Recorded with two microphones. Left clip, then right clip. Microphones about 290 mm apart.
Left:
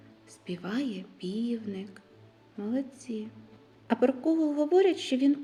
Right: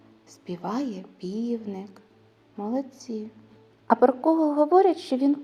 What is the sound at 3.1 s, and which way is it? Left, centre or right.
Speech, right.